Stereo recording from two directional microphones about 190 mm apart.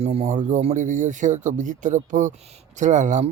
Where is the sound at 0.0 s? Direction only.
35° right (ahead or behind).